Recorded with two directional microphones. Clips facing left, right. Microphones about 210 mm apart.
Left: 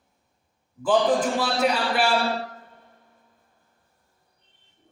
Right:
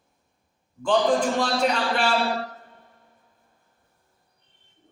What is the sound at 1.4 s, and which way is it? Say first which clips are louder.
Speech: even; 5° left (ahead or behind).